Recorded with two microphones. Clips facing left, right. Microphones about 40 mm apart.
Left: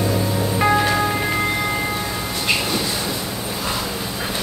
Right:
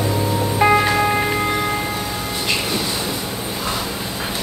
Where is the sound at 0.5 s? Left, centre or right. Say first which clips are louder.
Right 2 dB; centre.